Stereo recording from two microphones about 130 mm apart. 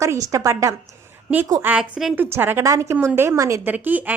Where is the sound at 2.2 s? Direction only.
15° right (ahead or behind).